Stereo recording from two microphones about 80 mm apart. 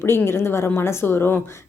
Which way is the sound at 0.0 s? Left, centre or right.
Left.